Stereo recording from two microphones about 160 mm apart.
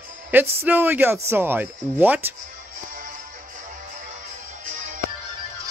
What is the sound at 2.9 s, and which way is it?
Music, 55° right (ahead or behind).